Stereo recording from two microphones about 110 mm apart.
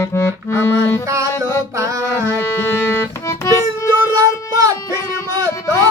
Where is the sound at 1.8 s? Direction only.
25° right (ahead or behind).